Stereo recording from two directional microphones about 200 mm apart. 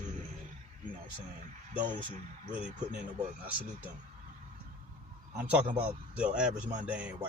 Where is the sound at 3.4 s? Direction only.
10° right (ahead or behind).